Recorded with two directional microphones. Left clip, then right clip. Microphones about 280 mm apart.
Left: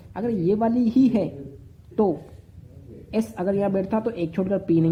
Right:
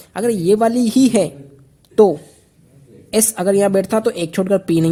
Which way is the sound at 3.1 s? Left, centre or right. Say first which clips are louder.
Right 9 dB; right.